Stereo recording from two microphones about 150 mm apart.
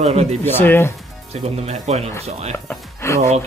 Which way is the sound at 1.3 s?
45° right (ahead or behind).